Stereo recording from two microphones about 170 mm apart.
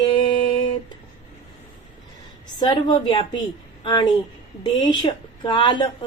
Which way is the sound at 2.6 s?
25° left (ahead or behind).